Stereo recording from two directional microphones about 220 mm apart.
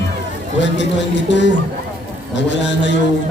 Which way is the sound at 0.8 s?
55° left (ahead or behind).